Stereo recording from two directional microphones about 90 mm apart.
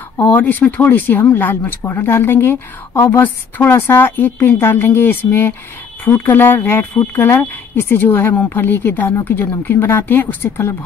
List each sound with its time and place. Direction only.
0.2 s speech: 20° left (ahead or behind)